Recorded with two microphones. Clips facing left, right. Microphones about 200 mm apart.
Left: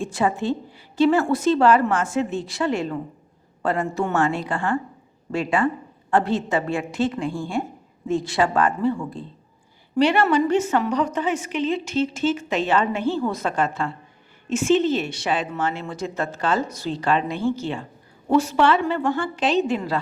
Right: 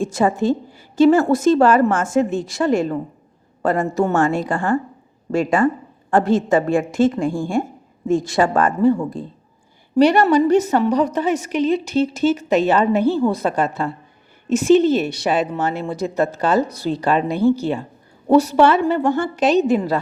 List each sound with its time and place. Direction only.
0.0 s a woman's voice: 45° right (ahead or behind)